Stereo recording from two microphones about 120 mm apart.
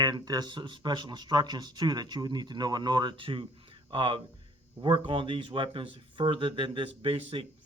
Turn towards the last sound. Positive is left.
turn(degrees=-50)  # may be behind; listen again after turning